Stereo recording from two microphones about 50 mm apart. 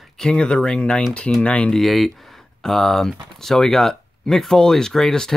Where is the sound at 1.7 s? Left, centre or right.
Centre.